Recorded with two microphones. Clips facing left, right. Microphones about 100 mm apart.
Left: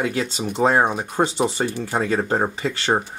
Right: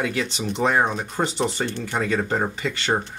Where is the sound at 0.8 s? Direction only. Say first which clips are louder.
Left 3 dB; 15° left (ahead or behind).